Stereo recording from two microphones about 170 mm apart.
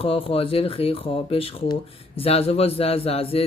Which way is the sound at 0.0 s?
35° left (ahead or behind).